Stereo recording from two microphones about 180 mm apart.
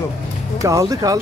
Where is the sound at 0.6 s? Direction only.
20° right (ahead or behind).